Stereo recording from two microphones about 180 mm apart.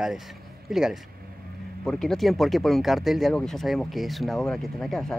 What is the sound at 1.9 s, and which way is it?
Speech, 5° left (ahead or behind).